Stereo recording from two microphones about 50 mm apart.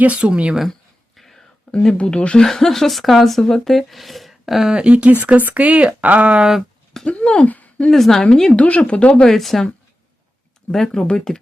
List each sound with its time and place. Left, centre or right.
0.0 s speech: right
0.7 s a sound: centre
2.0 s speech: left
2.4 s speech: centre
4.7 s speech: right
6.9 s speech: centre
7.4 s a sound: left
7.9 s a woman's voice: centre
8.5 s speech: left
9.2 s a woman's voice: centre
10.7 s a woman's voice: centre